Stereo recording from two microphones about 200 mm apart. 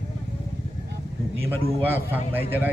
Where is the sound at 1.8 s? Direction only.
10° right (ahead or behind).